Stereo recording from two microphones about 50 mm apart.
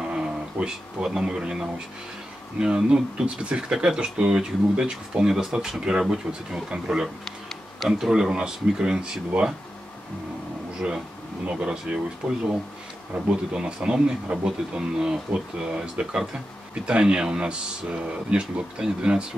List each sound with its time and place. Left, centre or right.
0.0 s a man's voice: centre
11.5 s speech: centre